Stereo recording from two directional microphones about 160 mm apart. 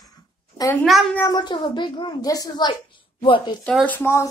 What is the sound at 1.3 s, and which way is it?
A child's voice, 30° left (ahead or behind).